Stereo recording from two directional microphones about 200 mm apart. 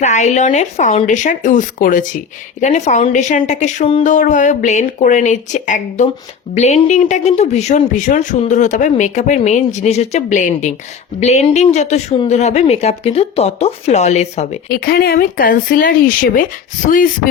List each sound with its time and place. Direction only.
0.0 s speech: 35° left (ahead or behind)
14.7 s speech: 50° left (ahead or behind)